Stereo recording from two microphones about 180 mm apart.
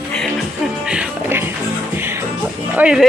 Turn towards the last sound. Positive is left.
turn(degrees=-5)  # may be behind; listen again after turning